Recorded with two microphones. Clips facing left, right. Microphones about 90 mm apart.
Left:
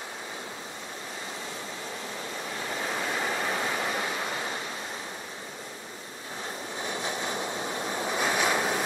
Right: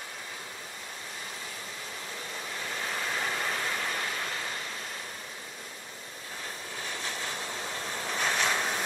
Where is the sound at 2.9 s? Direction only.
10° left (ahead or behind).